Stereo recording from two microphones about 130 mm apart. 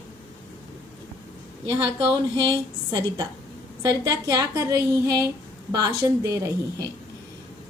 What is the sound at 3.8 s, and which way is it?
A woman's voice, 30° right (ahead or behind).